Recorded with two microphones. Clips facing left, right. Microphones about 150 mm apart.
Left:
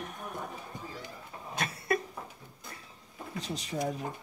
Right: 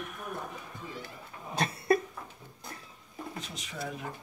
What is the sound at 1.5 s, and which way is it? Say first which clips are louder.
Cough: right 5 dB; 30° right (ahead or behind).